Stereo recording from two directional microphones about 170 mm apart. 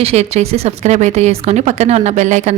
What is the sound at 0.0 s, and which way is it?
A woman's voice, 40° right (ahead or behind).